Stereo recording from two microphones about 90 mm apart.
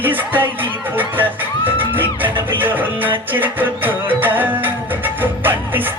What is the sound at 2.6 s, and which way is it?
Music, 20° right (ahead or behind).